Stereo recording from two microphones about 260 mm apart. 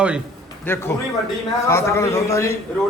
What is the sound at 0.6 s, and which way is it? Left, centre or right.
A man's voice, centre.